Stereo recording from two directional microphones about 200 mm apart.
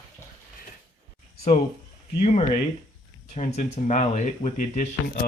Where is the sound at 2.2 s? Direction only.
35° left (ahead or behind).